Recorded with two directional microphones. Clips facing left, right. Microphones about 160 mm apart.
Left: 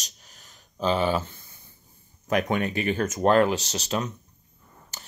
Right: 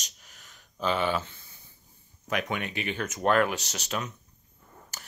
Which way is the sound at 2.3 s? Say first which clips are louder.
Left 7 dB; 40° left (ahead or behind).